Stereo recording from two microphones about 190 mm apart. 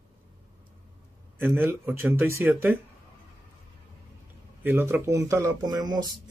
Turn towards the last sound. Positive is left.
turn(degrees=-20)  # may be behind; listen again after turning